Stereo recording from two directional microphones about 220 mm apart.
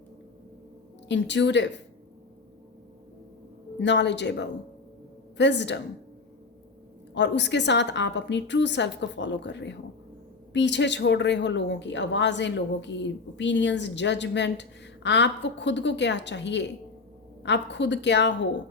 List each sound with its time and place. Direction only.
1.0 s speech: 55° left (ahead or behind)
3.8 s speech: 50° left (ahead or behind)
7.1 s speech: 55° left (ahead or behind)